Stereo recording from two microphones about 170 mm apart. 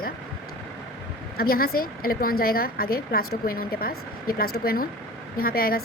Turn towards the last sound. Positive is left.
turn(degrees=60)  # may be behind; listen again after turning